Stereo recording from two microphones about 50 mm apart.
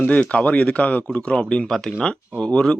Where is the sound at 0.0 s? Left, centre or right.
Left.